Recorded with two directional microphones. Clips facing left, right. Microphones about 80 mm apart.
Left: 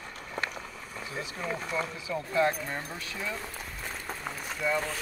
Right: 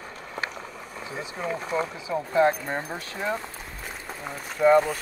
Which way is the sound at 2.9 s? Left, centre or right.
Right.